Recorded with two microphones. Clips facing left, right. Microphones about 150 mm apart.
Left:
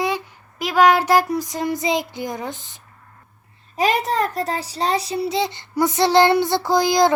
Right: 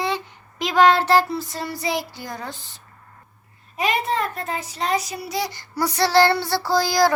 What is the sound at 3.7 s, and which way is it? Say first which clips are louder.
A child's voice: left 3 dB; 40° left (ahead or behind).